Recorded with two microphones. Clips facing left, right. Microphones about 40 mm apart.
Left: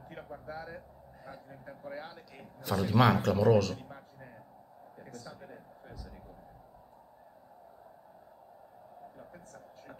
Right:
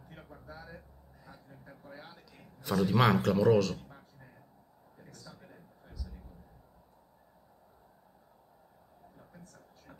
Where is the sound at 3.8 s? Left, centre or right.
Left.